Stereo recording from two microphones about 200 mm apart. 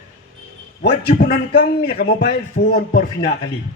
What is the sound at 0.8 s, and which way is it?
A man's voice, 55° left (ahead or behind).